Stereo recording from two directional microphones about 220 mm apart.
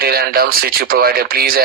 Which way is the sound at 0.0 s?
45° right (ahead or behind).